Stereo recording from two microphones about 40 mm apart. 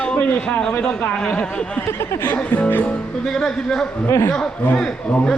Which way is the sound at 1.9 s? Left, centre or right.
Left.